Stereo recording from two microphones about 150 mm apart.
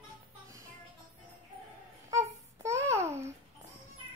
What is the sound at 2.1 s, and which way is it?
Babbling, 20° right (ahead or behind).